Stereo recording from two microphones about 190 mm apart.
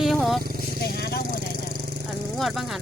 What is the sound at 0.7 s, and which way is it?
Vehicle, 55° left (ahead or behind).